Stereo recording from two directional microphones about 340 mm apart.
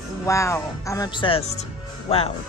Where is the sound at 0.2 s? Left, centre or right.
Centre.